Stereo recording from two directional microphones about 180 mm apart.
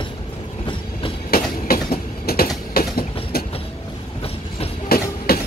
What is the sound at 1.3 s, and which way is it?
Train, 55° left (ahead or behind).